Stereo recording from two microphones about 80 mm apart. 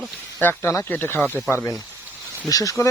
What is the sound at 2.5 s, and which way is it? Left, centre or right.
Speech, left.